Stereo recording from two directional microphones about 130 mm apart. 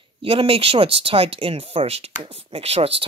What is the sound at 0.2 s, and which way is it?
Speech, 45° right (ahead or behind).